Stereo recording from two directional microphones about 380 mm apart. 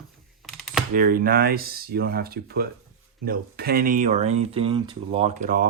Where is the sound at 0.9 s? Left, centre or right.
Right.